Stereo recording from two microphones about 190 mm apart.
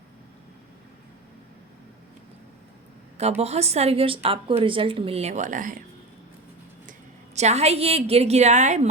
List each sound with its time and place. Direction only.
3.2 s a woman's voice: 35° right (ahead or behind)
7.3 s a woman's voice: 35° right (ahead or behind)